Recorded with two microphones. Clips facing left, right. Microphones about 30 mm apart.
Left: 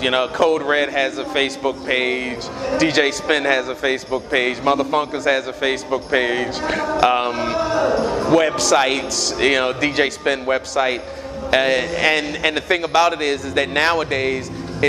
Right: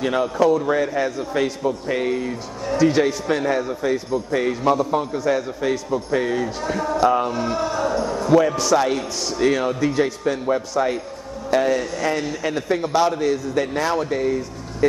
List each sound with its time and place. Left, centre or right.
0.0 s a man's voice: left
2.8 s a man's voice: left
4.1 s a man's voice: left
8.0 s music: left
8.7 s a man's voice: left
9.4 s a man's voice: left
10.8 s a man's voice: left
11.5 s a man's voice: left
13.2 s a man's voice: left